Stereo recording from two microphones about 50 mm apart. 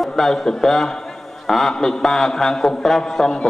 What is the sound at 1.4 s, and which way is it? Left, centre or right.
A man's voice, centre.